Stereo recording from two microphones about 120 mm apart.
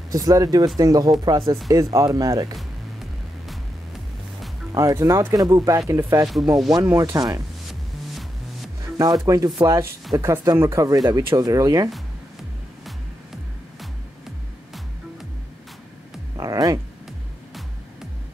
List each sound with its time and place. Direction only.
0.1 s speech: 30° right (ahead or behind)
2.5 s music: centre (ahead or behind)
4.7 s speech: 25° right (ahead or behind)
8.8 s music: 30° right (ahead or behind)
9.2 s speech: 30° right (ahead or behind)
13.7 s music: centre (ahead or behind)
16.3 s music: 30° right (ahead or behind)